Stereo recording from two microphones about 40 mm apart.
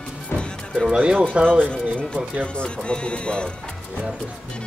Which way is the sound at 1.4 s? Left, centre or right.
Right.